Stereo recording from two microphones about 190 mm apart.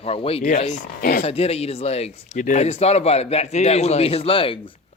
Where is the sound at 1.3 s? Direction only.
30° left (ahead or behind).